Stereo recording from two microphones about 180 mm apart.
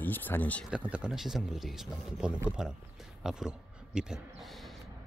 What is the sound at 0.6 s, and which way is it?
A man's voice, 5° right (ahead or behind).